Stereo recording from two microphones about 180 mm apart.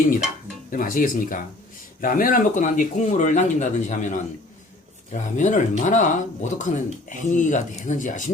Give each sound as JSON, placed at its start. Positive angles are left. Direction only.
{"t": 0.7, "sound": "speech", "side_deg": 50}